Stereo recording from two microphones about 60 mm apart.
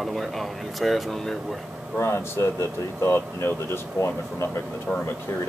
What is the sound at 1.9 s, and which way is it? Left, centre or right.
Speech, left.